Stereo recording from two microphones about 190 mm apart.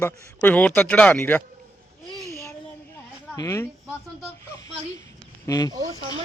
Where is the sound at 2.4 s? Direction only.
15° left (ahead or behind).